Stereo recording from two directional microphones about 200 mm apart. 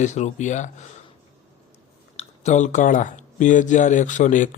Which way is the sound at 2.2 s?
35° left (ahead or behind).